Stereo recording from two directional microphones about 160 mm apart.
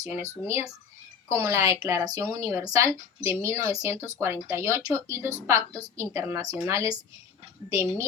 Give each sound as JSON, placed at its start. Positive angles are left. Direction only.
{"t": 0.0, "sound": "speech", "side_deg": -20}